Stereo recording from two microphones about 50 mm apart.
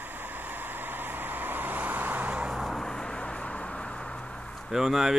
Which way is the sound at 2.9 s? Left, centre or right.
Centre.